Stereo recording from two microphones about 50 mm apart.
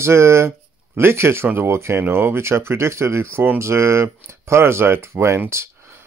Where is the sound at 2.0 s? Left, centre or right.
Right.